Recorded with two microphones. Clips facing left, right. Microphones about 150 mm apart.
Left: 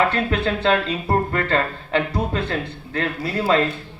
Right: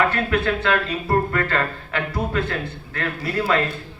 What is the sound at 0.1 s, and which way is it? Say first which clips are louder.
Speech: even; 25° left (ahead or behind).